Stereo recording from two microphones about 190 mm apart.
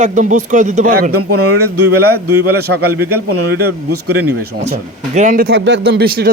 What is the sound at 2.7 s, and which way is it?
Speech, 80° right.